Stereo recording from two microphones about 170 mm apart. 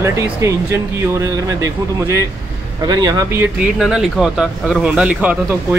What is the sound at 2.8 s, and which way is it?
Speech, 25° right (ahead or behind).